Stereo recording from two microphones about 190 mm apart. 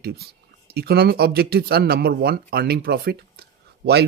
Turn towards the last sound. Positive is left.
turn(degrees=-55)  # may be behind; listen again after turning